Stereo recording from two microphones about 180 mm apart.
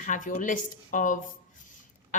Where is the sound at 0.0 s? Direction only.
45° left (ahead or behind).